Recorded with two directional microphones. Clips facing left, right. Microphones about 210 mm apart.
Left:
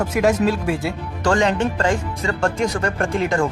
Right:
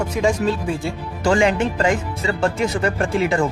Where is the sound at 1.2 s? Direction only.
10° right (ahead or behind).